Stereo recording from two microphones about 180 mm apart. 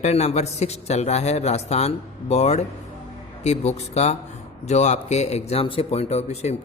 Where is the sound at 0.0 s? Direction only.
35° left (ahead or behind).